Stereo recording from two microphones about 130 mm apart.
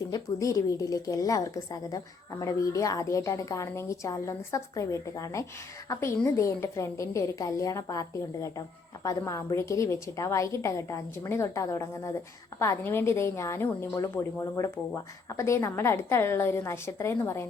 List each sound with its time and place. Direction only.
0.1 s a woman's voice: 25° left (ahead or behind)